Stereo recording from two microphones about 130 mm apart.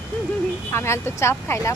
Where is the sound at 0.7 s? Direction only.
20° left (ahead or behind).